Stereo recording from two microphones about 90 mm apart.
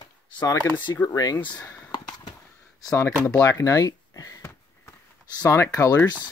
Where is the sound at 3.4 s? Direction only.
35° left (ahead or behind).